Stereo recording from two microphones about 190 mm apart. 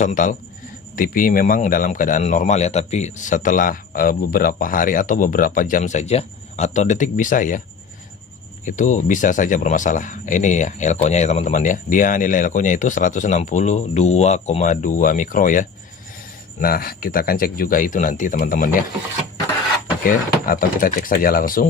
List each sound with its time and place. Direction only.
0.0 s a man's voice: 40° left (ahead or behind)
8.6 s a man's voice: 40° left (ahead or behind)
20.1 s a man's voice: 45° left (ahead or behind)